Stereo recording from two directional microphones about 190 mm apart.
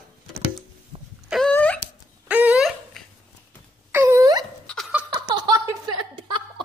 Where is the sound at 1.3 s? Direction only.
5° left (ahead or behind).